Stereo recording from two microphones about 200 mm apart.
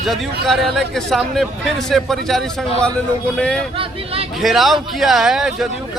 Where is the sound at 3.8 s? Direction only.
30° right (ahead or behind).